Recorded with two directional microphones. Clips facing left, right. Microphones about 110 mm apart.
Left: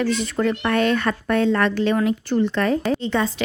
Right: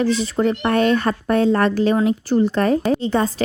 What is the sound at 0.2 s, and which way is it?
A woman's voice, 30° right (ahead or behind).